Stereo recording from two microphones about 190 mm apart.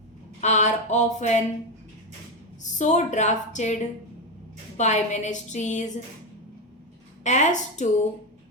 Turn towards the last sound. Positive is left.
turn(degrees=40)  # may be behind; listen again after turning